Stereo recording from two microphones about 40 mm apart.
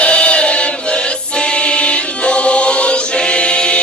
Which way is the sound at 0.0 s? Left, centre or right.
Left.